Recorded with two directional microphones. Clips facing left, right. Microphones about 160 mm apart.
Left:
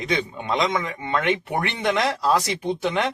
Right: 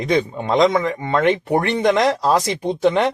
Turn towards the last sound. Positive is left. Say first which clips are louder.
# right 6 dB
turn(degrees=-40)  # may be behind; listen again after turning